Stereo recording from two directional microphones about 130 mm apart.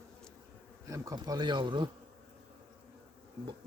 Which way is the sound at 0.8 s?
25° right (ahead or behind).